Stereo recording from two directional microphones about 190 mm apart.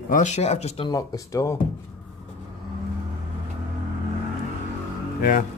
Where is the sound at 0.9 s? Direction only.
20° left (ahead or behind).